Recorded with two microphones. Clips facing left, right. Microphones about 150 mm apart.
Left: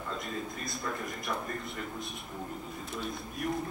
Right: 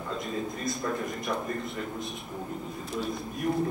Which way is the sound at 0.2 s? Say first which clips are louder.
Right 5 dB; centre (ahead or behind).